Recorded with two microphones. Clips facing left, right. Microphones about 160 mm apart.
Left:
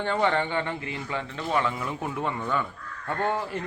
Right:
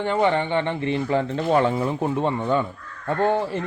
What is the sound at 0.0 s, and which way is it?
Speech, 15° right (ahead or behind).